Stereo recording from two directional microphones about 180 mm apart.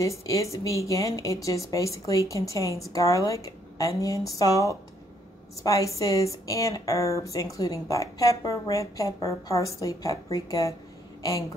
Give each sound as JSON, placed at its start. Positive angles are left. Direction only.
{"t": 0.0, "sound": "a woman's voice", "side_deg": 15}